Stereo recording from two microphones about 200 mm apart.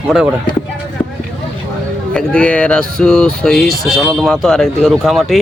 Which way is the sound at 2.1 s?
5° left (ahead or behind).